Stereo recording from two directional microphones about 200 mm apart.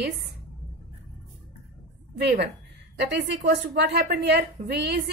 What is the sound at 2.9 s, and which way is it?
A woman's voice, 55° right (ahead or behind).